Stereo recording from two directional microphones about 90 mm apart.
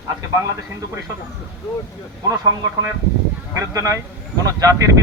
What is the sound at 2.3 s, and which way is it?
Speech, 35° right (ahead or behind).